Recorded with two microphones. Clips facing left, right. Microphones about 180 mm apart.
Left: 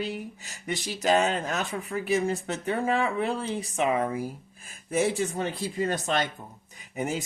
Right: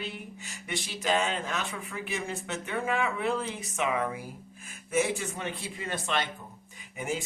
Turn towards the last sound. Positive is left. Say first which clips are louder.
# left 3 dB
turn(degrees=40)  # may be behind; listen again after turning